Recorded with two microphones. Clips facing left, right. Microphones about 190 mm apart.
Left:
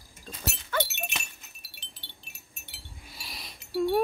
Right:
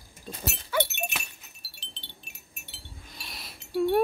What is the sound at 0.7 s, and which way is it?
Wind chime, 10° right (ahead or behind).